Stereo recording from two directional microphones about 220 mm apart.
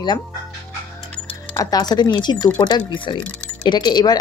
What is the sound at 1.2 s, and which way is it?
Speech, 15° left (ahead or behind).